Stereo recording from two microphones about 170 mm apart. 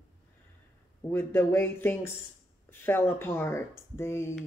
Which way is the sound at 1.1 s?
15° left (ahead or behind).